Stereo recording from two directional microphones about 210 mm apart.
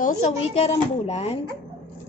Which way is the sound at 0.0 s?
35° left (ahead or behind).